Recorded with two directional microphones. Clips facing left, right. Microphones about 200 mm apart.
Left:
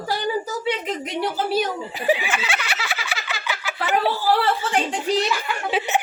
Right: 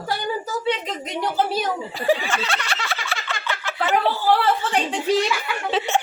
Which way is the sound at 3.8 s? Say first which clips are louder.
Right 1 dB; 15° left (ahead or behind).